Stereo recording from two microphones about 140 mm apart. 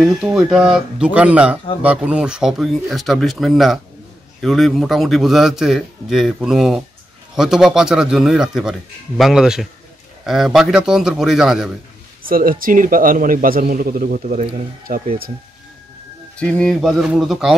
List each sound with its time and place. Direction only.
0.0 s a man's voice: 5° right (ahead or behind)
12.2 s a man's voice: 90° right; by 14.4 s 75° right (ahead or behind)
14.9 s speech: 90° right
16.3 s a man's voice: 5° left (ahead or behind)